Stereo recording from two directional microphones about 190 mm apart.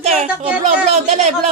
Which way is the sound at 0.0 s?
35° right (ahead or behind).